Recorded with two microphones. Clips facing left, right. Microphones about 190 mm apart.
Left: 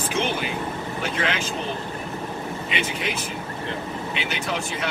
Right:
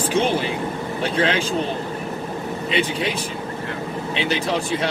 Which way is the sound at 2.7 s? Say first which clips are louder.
Right 7 dB; 35° right (ahead or behind).